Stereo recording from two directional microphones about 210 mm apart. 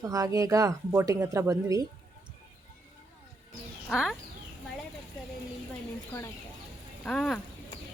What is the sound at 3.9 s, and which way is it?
Speech, centre (ahead or behind).